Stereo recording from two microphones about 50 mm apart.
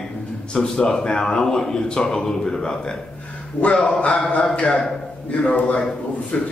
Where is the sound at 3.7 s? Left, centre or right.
Left.